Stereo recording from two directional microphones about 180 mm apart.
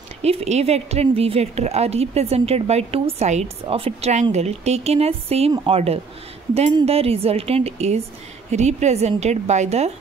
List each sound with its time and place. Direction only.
0.2 s a woman's voice: 35° right (ahead or behind)